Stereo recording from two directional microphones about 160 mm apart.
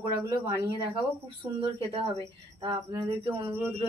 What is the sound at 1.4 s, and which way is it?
Speech, 30° right (ahead or behind).